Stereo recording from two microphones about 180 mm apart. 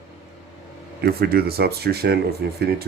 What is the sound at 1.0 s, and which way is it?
Speech, 60° right (ahead or behind).